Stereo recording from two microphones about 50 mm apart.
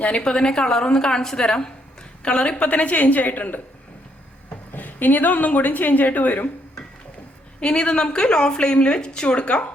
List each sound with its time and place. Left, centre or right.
0.0 s a woman's voice: left
7.6 s speech: left